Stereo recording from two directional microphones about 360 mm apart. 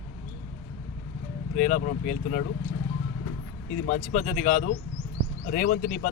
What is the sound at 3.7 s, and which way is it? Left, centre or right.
Speech, left.